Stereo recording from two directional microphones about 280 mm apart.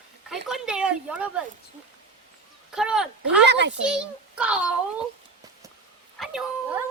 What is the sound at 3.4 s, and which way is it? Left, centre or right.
Speech, right.